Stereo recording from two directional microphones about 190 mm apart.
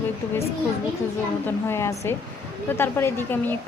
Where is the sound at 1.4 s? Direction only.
15° left (ahead or behind).